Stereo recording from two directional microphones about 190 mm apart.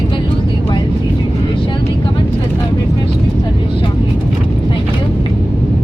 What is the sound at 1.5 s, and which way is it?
Vehicle, 25° left (ahead or behind).